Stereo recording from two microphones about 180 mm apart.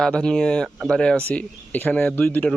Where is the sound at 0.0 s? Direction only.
5° left (ahead or behind).